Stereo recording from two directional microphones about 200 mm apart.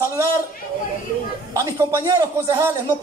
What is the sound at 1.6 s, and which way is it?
Speech, 15° right (ahead or behind).